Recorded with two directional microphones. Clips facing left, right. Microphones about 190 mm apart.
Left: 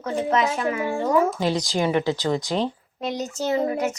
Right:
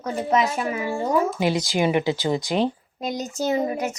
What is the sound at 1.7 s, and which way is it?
A child's voice, 15° right (ahead or behind).